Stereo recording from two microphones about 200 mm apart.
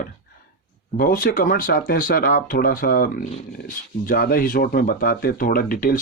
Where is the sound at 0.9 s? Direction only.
45° left (ahead or behind).